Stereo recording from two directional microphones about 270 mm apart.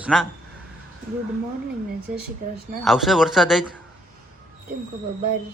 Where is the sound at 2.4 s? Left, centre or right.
Right.